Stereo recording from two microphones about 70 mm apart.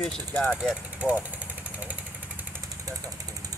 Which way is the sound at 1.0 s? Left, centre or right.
Right.